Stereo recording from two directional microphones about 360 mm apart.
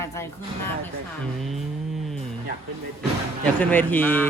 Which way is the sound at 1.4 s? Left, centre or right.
Centre.